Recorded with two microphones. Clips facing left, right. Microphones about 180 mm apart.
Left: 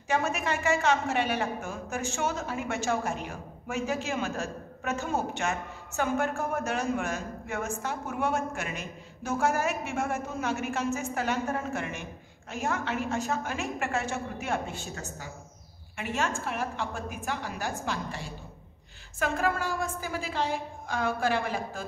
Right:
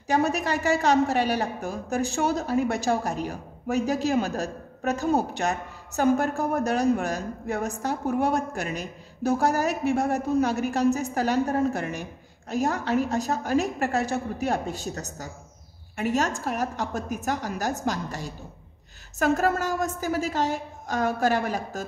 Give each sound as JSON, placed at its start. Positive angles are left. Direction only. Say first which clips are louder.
{"t": 0.1, "sound": "a woman's voice", "louder": "right 5 dB", "side_deg": -35}